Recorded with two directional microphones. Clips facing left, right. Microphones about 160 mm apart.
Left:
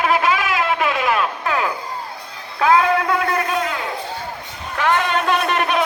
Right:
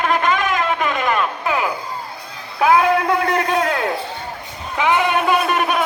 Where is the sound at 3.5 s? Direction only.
55° right (ahead or behind).